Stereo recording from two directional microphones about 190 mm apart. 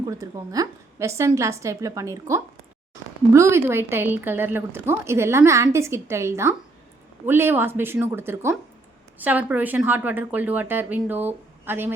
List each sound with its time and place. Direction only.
0.0 s a woman's voice: 20° right (ahead or behind)